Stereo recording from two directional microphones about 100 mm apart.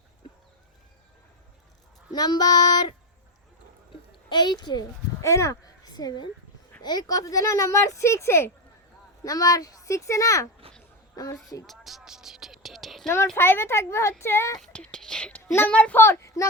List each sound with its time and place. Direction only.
2.1 s child singing: 40° left (ahead or behind)
4.3 s child singing: 50° left (ahead or behind)
5.2 s a woman's voice: 30° left (ahead or behind)
11.6 s a sound: centre (ahead or behind)
13.3 s a woman's voice: 25° left (ahead or behind)
14.6 s whispering: 10° left (ahead or behind)
15.5 s a child's voice: 15° left (ahead or behind)
16.0 s speech: 30° left (ahead or behind)